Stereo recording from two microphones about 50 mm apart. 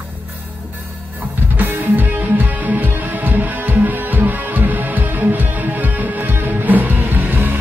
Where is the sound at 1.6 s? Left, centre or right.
Right.